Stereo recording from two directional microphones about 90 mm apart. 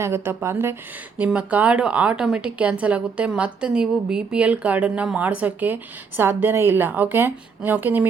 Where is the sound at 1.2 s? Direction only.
15° right (ahead or behind).